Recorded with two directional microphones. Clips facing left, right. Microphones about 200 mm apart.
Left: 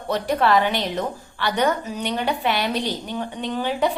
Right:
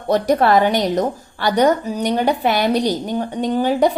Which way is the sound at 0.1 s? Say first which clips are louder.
Right 5 dB; 45° right (ahead or behind).